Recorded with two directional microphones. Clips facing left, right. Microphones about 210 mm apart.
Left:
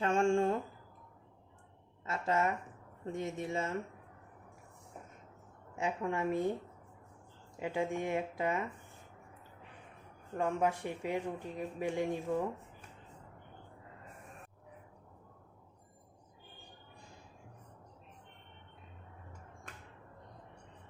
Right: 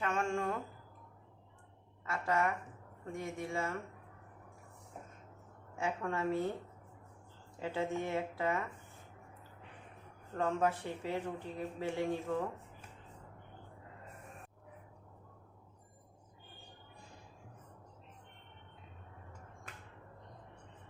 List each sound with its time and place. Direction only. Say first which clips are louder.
0.0 s a sound: left 6 dB; 30° left (ahead or behind)
2.0 s speech: left 1 dB; 25° left (ahead or behind)
5.7 s speech: left 2 dB; 15° left (ahead or behind)
7.6 s speech: left 2 dB; 15° left (ahead or behind)
10.3 s speech: left 1 dB; 15° left (ahead or behind)